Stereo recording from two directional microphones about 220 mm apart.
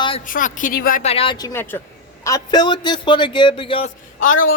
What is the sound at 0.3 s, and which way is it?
A woman's voice, 40° left (ahead or behind).